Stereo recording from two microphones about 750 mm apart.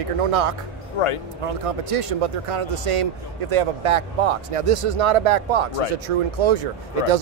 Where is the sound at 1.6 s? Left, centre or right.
Right.